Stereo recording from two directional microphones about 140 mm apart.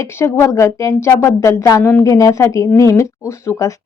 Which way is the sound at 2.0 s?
25° left (ahead or behind).